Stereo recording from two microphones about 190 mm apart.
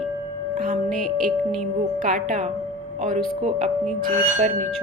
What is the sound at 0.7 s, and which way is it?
A woman's voice, 40° right (ahead or behind).